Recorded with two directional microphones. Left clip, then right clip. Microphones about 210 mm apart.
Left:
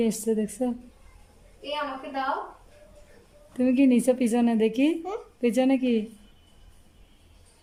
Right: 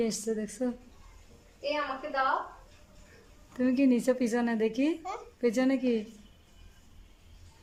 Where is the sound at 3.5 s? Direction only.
15° left (ahead or behind).